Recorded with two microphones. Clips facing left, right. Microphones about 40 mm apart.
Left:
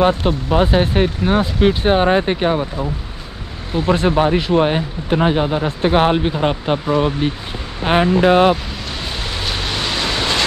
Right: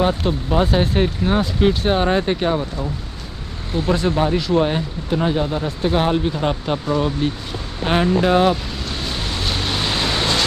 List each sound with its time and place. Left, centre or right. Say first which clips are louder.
0.0 s speech: left 4 dB; left
4.2 s speech: left 3 dB; left